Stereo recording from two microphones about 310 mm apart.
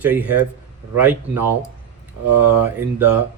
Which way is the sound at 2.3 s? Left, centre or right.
Right.